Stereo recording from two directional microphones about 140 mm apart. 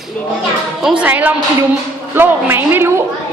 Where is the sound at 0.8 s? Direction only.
5° right (ahead or behind).